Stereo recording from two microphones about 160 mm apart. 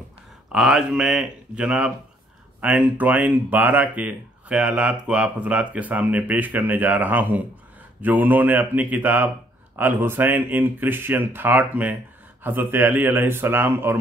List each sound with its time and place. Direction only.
0.5 s speech: 5° right (ahead or behind)